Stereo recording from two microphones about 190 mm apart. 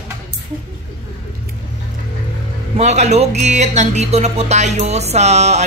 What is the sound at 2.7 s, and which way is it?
Speech, 35° right (ahead or behind).